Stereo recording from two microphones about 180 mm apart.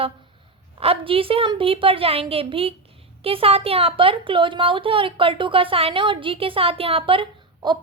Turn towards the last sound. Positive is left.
turn(degrees=-30)  # may be behind; listen again after turning